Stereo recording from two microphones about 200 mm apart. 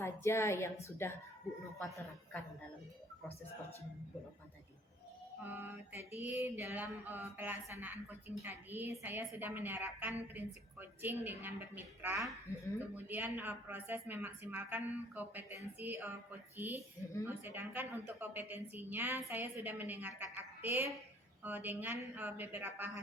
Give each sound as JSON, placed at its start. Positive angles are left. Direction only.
{"t": 0.0, "sound": "a woman's voice", "side_deg": 15}
{"t": 5.4, "sound": "a woman's voice", "side_deg": -10}